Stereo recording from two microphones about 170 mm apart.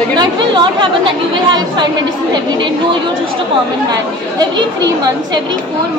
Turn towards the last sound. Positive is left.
turn(degrees=-25)  # may be behind; listen again after turning